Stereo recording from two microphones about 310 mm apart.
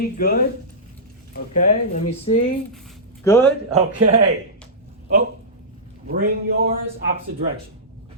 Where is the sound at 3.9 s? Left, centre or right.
Centre.